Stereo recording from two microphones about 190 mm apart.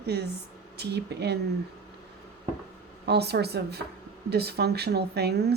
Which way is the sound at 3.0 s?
60° right (ahead or behind).